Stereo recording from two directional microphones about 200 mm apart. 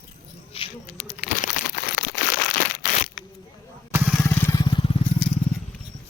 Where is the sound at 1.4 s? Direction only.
45° left (ahead or behind).